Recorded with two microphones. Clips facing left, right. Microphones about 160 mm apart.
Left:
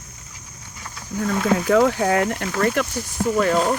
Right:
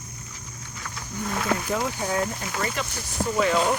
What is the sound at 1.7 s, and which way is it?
Speech, 90° left.